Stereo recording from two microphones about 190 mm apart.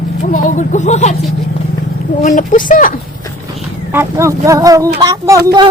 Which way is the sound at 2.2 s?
45° left (ahead or behind).